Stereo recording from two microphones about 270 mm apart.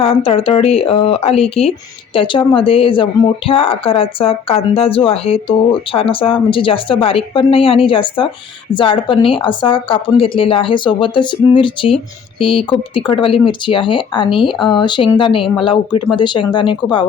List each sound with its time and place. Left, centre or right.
0.0 s speech: left